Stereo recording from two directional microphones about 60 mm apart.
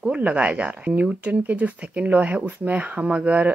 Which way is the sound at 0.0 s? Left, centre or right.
Centre.